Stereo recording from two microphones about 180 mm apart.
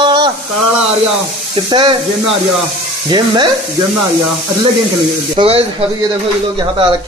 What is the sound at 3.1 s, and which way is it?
Sizzle, 25° right (ahead or behind).